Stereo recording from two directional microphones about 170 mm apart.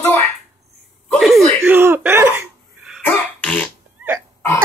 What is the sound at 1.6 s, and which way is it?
Speech, 10° right (ahead or behind).